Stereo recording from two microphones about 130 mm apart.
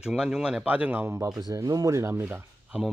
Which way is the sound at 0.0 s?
5° right (ahead or behind).